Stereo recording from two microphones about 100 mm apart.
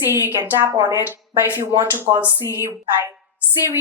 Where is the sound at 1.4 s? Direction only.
25° right (ahead or behind).